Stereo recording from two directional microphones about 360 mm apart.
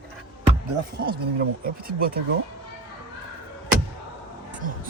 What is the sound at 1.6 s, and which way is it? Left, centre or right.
Speech, right.